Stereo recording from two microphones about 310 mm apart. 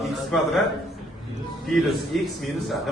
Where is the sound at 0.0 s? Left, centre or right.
Centre.